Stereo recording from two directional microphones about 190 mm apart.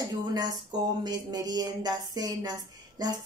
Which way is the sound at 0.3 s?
20° right (ahead or behind).